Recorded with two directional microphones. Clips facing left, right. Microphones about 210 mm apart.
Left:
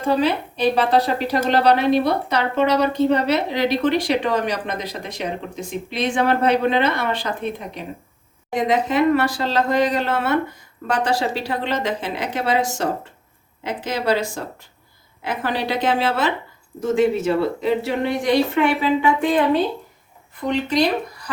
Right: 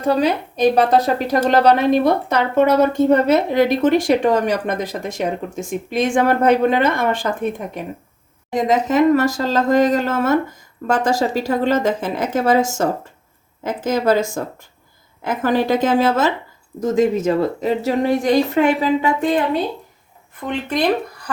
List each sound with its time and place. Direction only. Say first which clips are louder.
0.0 s a woman's voice: right 2 dB; 40° right (ahead or behind)
20.5 s a woman's voice: even; 50° right (ahead or behind)